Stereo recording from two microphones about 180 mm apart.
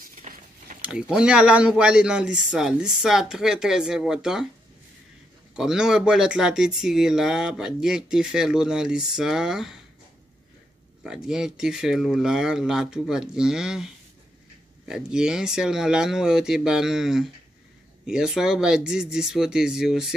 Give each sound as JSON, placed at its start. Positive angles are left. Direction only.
{"t": 0.0, "sound": "a sound", "side_deg": -45}
{"t": 0.8, "sound": "speech", "side_deg": -5}
{"t": 5.6, "sound": "speech", "side_deg": -5}
{"t": 11.1, "sound": "speech", "side_deg": -5}
{"t": 14.9, "sound": "speech", "side_deg": -5}